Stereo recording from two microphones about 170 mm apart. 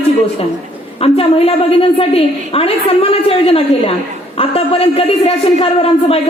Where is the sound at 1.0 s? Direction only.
35° left (ahead or behind).